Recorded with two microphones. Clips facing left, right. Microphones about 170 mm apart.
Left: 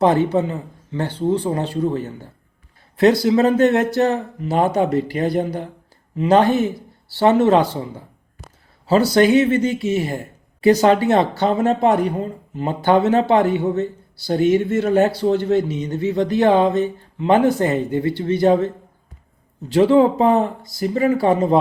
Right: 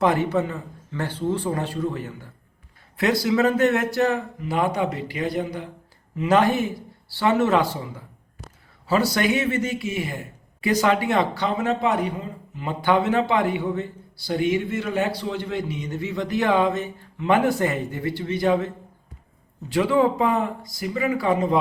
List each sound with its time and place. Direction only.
0.0 s speech: 25° left (ahead or behind)
9.9 s speech: 40° left (ahead or behind)
11.4 s speech: 45° left (ahead or behind)